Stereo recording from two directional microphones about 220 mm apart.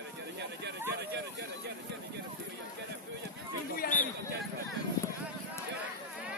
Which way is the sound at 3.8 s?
40° left (ahead or behind).